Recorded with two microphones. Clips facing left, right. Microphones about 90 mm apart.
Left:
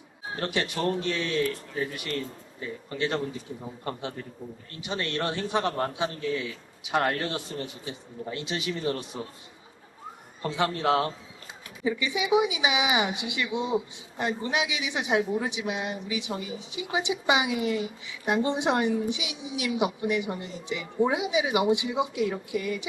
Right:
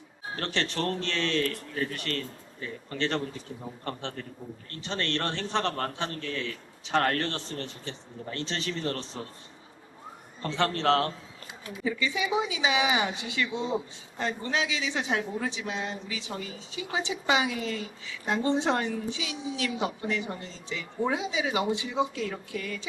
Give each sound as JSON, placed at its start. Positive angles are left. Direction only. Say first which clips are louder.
{"t": 0.3, "sound": "a woman's voice", "louder": "left 1 dB", "side_deg": 10}
{"t": 10.4, "sound": "a woman's voice", "louder": "even", "side_deg": 10}